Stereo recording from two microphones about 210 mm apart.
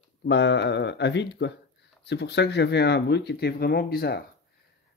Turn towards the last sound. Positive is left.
turn(degrees=45)  # may be behind; listen again after turning